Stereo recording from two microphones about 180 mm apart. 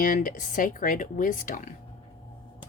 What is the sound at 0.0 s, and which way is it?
Speech, 50° left (ahead or behind).